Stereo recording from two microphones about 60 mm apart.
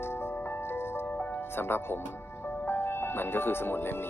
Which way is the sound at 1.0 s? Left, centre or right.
Left.